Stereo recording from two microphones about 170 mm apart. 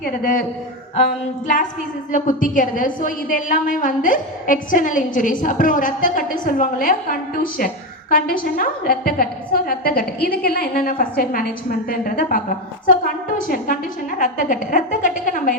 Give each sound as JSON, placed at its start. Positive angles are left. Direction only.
{"t": 0.0, "sound": "a woman's voice", "side_deg": 55}
{"t": 14.2, "sound": "a woman's voice", "side_deg": 50}